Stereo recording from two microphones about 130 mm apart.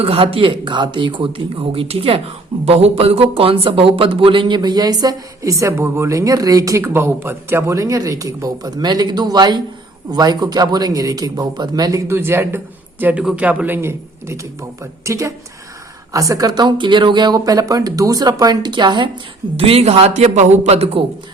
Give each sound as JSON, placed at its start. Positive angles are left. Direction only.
{"t": 0.0, "sound": "speech", "side_deg": -45}
{"t": 19.5, "sound": "speech", "side_deg": -50}